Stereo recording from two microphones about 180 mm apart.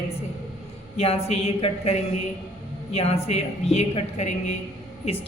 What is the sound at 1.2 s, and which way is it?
A woman's voice, 35° left (ahead or behind).